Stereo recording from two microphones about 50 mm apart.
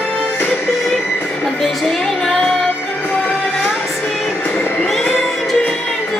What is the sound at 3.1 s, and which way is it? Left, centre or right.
Music, centre.